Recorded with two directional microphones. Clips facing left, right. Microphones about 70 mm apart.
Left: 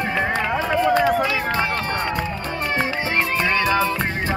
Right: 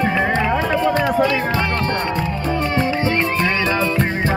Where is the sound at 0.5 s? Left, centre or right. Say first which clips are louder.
Right 1 dB; centre.